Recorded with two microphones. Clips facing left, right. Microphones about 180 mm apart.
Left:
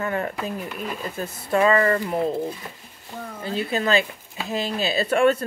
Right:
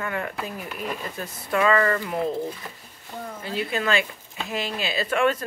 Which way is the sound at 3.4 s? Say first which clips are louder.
Left 3 dB; 35° left (ahead or behind).